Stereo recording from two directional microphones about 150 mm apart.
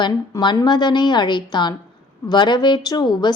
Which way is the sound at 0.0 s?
30° left (ahead or behind).